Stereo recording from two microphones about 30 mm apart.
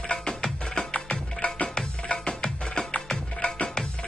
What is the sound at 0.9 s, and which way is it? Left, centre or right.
Music, left.